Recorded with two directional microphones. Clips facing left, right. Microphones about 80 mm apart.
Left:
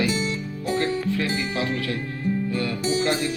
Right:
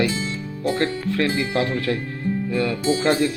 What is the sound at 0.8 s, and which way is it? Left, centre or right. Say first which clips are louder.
Speech: even; right.